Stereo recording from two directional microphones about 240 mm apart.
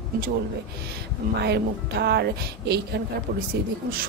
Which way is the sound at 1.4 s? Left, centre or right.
Right.